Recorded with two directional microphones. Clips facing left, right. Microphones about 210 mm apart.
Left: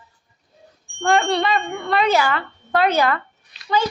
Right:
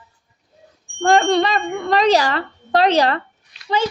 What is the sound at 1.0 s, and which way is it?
A woman's voice, 40° right (ahead or behind).